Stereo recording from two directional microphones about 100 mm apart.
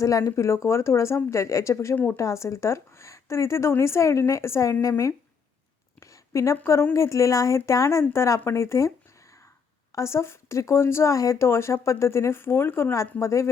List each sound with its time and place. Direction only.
0.0 s speech: 30° left (ahead or behind)
6.0 s a sound: 30° left (ahead or behind)
6.7 s speech: 25° left (ahead or behind)
9.9 s speech: 30° left (ahead or behind)